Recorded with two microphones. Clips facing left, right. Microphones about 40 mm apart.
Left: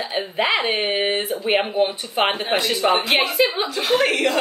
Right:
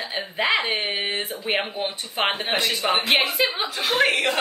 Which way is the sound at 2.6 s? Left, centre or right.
Centre.